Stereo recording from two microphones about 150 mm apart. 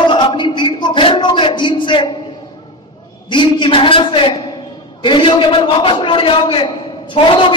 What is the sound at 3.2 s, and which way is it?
A man's voice, 30° left (ahead or behind).